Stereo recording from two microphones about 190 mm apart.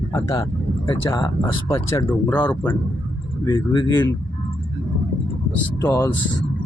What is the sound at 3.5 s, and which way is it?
Speech, 25° left (ahead or behind).